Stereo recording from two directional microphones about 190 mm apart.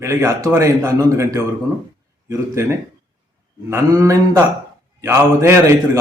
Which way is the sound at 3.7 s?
15° right (ahead or behind).